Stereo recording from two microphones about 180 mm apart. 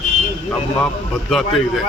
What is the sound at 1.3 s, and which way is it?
Speech, centre (ahead or behind).